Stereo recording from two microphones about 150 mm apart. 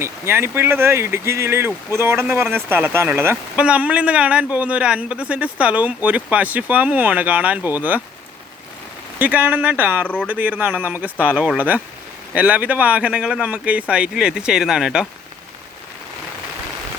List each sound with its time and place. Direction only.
0.0 s speech: 15° right (ahead or behind)
9.1 s speech: 10° right (ahead or behind)